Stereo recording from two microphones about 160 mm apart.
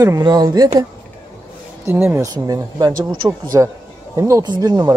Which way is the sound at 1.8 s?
15° right (ahead or behind).